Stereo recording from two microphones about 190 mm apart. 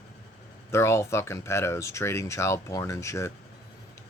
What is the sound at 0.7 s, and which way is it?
A man's voice, 15° left (ahead or behind).